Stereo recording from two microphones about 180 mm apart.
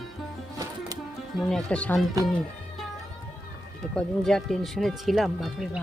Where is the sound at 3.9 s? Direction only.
Centre (ahead or behind).